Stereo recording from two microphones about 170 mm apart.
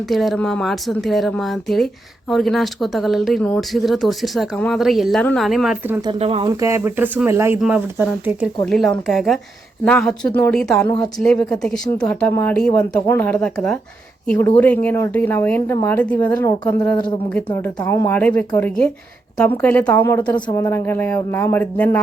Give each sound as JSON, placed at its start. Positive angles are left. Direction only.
{"t": 0.1, "sound": "speech", "side_deg": 0}
{"t": 6.1, "sound": "speech", "side_deg": -35}
{"t": 6.5, "sound": "speech", "side_deg": -20}
{"t": 8.6, "sound": "speech", "side_deg": 5}